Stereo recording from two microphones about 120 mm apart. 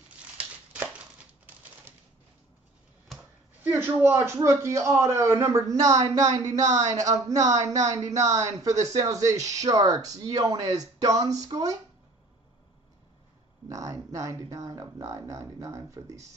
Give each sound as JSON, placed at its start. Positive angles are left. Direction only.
{"t": 3.1, "sound": "a sound", "side_deg": 0}
{"t": 3.6, "sound": "a man's voice", "side_deg": -15}
{"t": 13.7, "sound": "a man's voice", "side_deg": -25}